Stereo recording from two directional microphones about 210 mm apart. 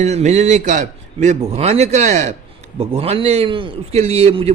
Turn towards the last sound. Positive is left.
turn(degrees=-30)  # may be behind; listen again after turning